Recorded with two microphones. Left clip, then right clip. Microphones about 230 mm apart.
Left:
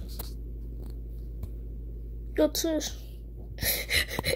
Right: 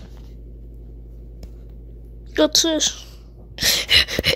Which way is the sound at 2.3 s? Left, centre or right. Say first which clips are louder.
Right 9 dB; centre.